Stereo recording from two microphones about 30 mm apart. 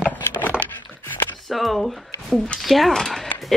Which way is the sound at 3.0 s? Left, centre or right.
Centre.